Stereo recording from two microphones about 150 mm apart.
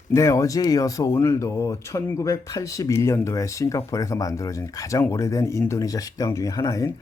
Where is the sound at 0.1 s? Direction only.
20° left (ahead or behind).